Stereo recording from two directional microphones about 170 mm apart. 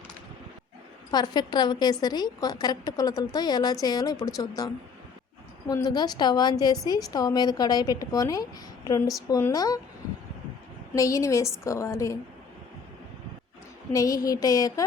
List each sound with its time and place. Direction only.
1.1 s a woman's voice: 25° left (ahead or behind)
10.9 s a woman's voice: 20° left (ahead or behind)
13.9 s a woman's voice: 20° left (ahead or behind)